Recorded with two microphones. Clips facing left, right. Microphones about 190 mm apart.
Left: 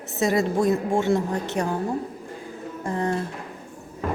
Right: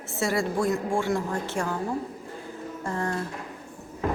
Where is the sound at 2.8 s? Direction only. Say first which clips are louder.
Left 4 dB; 20° left (ahead or behind).